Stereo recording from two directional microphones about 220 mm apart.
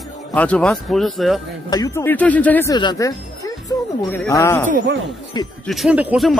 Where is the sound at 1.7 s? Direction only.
15° left (ahead or behind).